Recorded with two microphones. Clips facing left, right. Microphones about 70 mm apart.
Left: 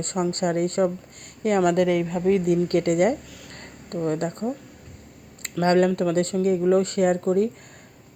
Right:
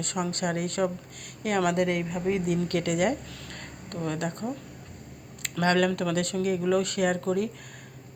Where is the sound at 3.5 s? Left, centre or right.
Left.